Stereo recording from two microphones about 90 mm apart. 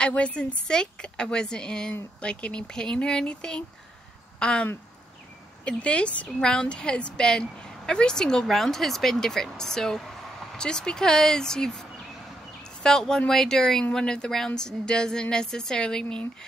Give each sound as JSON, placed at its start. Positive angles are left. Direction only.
{"t": 0.0, "sound": "a woman's voice", "side_deg": 10}
{"t": 5.7, "sound": "a woman's voice", "side_deg": 15}
{"t": 12.8, "sound": "a woman's voice", "side_deg": 5}